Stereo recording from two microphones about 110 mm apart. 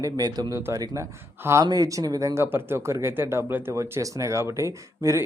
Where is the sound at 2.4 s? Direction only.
20° right (ahead or behind).